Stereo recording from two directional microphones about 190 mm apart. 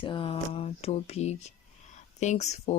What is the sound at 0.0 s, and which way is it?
Speech, 25° left (ahead or behind).